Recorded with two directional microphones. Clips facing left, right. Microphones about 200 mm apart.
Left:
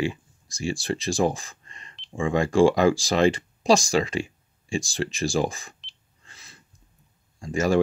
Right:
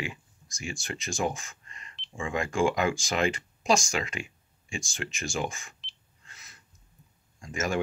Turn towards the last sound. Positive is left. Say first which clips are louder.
# left 8 dB
turn(degrees=35)  # may be behind; listen again after turning